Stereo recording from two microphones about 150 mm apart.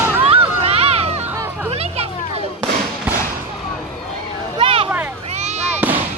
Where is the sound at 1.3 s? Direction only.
15° right (ahead or behind).